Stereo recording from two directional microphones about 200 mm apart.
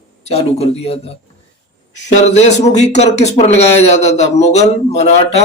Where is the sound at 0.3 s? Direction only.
30° left (ahead or behind).